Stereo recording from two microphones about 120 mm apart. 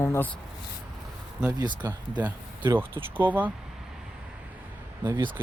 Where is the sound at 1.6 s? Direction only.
35° right (ahead or behind).